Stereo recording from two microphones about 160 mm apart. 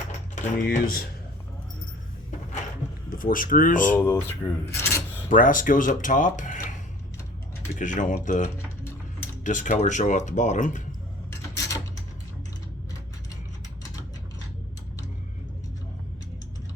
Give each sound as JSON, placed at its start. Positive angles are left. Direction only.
{"t": 0.6, "sound": "speech", "side_deg": 65}
{"t": 3.1, "sound": "speech", "side_deg": 60}
{"t": 3.9, "sound": "speech", "side_deg": 15}
{"t": 5.3, "sound": "speech", "side_deg": 55}
{"t": 7.8, "sound": "speech", "side_deg": 55}
{"t": 11.3, "sound": "a sound", "side_deg": 20}